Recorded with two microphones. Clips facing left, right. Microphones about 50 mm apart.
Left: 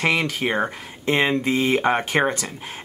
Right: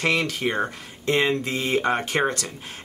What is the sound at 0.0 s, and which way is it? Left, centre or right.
Speech, left.